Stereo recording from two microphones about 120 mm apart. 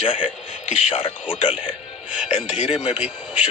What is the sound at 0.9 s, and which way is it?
Speech, 50° left (ahead or behind).